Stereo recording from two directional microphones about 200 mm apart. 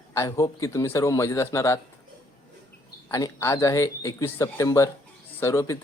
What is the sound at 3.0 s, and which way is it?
Speech, 15° left (ahead or behind).